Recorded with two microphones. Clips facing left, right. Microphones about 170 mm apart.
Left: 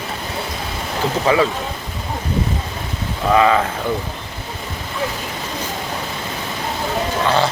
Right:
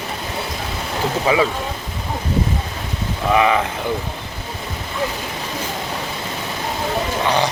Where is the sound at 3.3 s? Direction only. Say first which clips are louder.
Left 2 dB; 15° right (ahead or behind).